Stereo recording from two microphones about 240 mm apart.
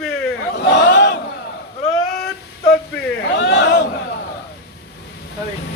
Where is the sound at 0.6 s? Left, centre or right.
Left.